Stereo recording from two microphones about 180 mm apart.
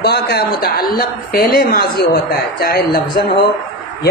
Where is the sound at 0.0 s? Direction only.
65° left (ahead or behind).